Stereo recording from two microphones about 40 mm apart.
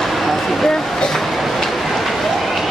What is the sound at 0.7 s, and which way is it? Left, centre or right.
Speech, centre.